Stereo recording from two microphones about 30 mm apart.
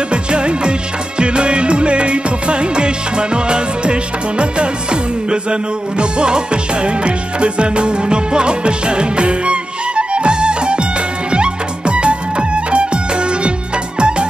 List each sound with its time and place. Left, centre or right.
0.1 s music of bollywood: right
1.2 s music: right